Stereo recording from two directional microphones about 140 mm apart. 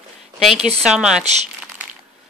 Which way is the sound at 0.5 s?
45° right (ahead or behind).